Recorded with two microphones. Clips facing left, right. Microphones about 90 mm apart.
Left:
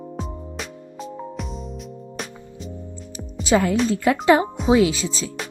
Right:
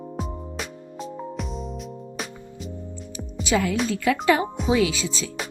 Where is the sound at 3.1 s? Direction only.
35° left (ahead or behind).